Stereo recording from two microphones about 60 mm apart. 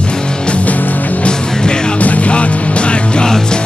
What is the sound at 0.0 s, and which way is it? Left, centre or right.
Music, centre.